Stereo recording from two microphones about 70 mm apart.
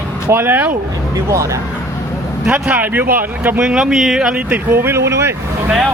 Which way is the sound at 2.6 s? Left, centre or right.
Right.